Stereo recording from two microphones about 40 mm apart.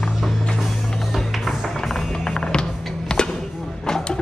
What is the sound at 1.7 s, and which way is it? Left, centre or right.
Music, centre.